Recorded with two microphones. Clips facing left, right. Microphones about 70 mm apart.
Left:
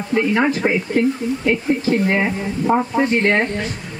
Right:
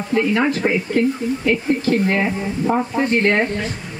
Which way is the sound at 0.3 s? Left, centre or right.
Centre.